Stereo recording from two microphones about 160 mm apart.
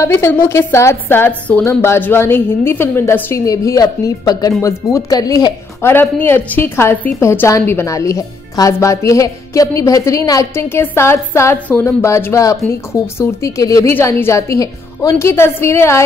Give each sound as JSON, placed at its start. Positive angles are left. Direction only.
{"t": 0.0, "sound": "a woman's voice", "side_deg": 15}